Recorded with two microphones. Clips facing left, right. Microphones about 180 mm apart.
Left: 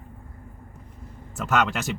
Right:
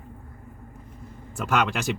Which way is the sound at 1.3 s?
Centre (ahead or behind).